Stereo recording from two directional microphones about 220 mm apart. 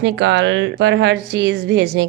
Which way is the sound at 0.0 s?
55° right (ahead or behind).